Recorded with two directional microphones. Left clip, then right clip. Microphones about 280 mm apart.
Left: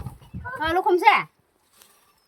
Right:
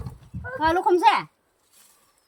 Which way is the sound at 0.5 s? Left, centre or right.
Centre.